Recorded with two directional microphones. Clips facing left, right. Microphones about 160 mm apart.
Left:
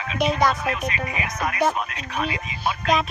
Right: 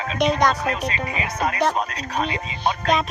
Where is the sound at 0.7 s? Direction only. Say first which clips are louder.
Right 1 dB; 30° right (ahead or behind).